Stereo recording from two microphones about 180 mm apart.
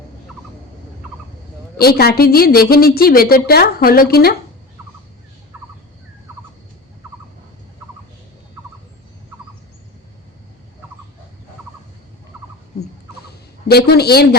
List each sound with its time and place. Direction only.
1.8 s a woman's voice: 60° left (ahead or behind)
13.7 s a woman's voice: 60° left (ahead or behind)